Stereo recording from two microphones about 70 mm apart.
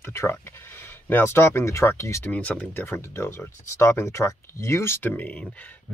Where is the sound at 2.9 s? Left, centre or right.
Left.